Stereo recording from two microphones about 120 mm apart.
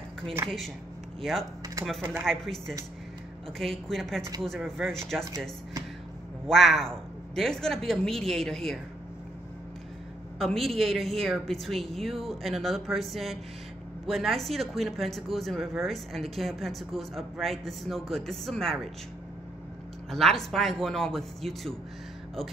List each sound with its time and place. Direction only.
0.4 s speech: 25° right (ahead or behind)
2.2 s speech: 5° left (ahead or behind)
6.4 s speech: centre (ahead or behind)
10.4 s speech: centre (ahead or behind)
20.1 s speech: centre (ahead or behind)